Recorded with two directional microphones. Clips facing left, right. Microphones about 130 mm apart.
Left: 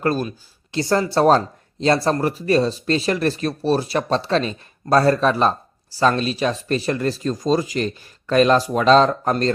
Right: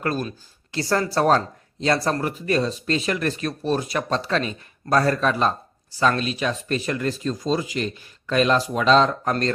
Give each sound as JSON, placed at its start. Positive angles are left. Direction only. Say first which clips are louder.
{"t": 0.0, "sound": "speech", "louder": "left 4 dB", "side_deg": 30}